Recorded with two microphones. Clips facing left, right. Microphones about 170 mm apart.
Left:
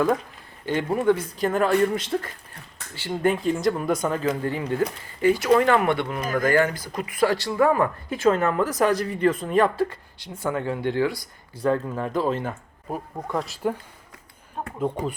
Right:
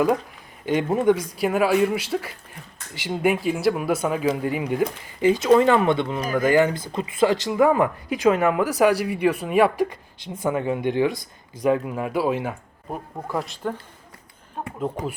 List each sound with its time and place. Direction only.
0.6 s speech: 15° right (ahead or behind); by 13.8 s 10° left (ahead or behind)
14.8 s speech: centre (ahead or behind)